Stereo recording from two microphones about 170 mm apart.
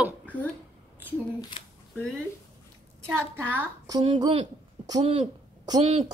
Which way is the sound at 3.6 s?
20° right (ahead or behind).